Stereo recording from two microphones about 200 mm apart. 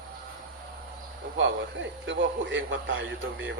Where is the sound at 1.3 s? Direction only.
70° right (ahead or behind).